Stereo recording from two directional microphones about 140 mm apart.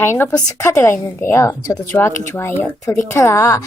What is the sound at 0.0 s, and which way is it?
A woman's voice, 15° left (ahead or behind).